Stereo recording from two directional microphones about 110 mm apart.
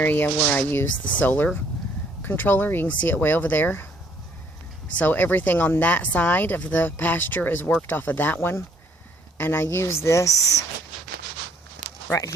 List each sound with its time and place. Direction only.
0.0 s speech: 15° left (ahead or behind)
4.9 s speech: 15° left (ahead or behind)